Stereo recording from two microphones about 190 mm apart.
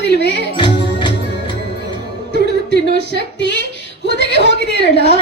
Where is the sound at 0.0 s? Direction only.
65° left (ahead or behind).